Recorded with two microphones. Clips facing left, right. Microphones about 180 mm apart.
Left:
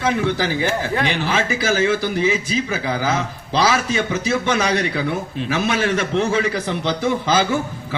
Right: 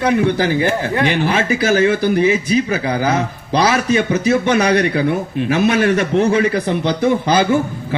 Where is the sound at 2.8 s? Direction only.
20° right (ahead or behind).